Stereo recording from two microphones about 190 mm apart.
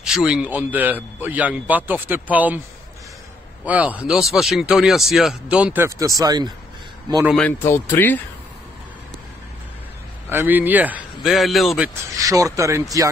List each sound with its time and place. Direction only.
0.0 s speech: 5° right (ahead or behind)
3.6 s speech: 10° right (ahead or behind)
7.3 s a man's voice: 5° left (ahead or behind)
10.3 s speech: 10° right (ahead or behind)
12.2 s speech: 15° right (ahead or behind)